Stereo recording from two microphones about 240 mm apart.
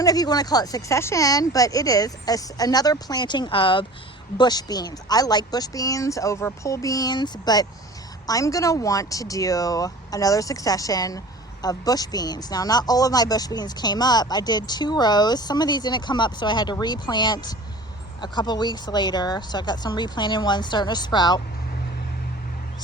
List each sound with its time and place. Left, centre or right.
0.0 s speech: centre